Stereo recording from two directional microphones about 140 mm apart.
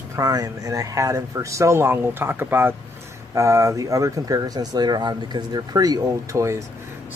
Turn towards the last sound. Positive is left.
turn(degrees=-20)  # may be behind; listen again after turning